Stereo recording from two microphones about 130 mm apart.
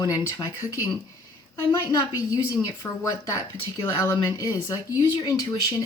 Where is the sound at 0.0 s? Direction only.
30° left (ahead or behind).